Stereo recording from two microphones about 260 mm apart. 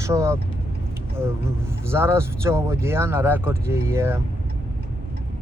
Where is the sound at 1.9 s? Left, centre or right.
Centre.